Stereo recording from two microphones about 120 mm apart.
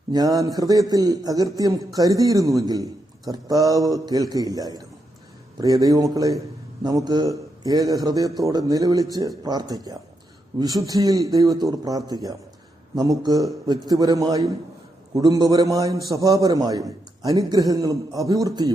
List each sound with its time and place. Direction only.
0.1 s a man's voice: 30° right (ahead or behind)